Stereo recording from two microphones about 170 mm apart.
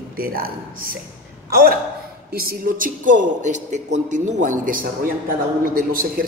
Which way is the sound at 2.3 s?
60° right (ahead or behind).